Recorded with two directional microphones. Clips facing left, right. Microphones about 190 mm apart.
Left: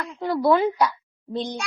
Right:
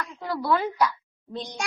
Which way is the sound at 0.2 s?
25° left (ahead or behind).